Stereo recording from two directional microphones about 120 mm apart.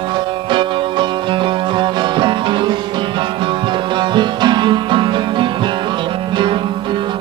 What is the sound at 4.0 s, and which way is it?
Music, 40° right (ahead or behind).